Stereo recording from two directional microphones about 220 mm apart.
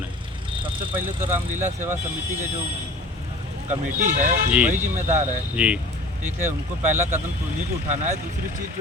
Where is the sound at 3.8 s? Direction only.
35° right (ahead or behind).